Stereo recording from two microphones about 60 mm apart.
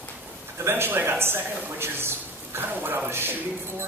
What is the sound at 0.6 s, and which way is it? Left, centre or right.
A man's voice, right.